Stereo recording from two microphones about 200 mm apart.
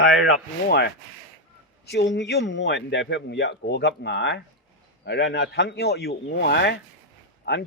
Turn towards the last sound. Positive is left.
turn(degrees=55)  # may be behind; listen again after turning